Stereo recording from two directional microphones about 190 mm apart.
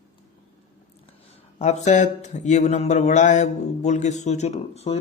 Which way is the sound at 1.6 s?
35° left (ahead or behind).